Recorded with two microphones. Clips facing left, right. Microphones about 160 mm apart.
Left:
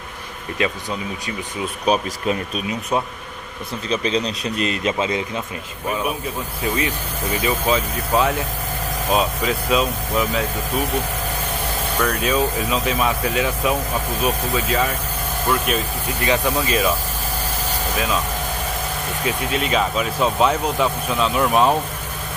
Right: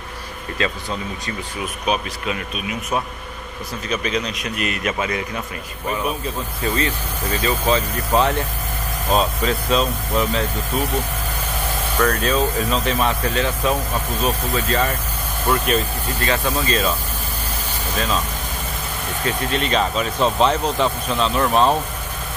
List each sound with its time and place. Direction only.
0.6 s speech: 15° left (ahead or behind)
1.9 s speech: 35° left (ahead or behind)
3.9 s a man's voice: 30° left (ahead or behind)
6.6 s speech: 10° left (ahead or behind)
12.0 s speech: 10° left (ahead or behind)
16.2 s speech: 15° left (ahead or behind)
19.2 s speech: 5° left (ahead or behind)